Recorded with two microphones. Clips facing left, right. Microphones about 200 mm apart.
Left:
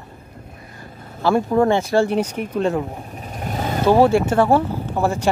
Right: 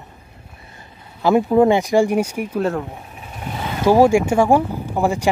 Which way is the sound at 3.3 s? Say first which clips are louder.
Left 3 dB; 45° left (ahead or behind).